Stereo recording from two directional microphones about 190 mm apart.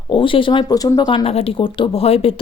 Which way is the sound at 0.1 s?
25° left (ahead or behind).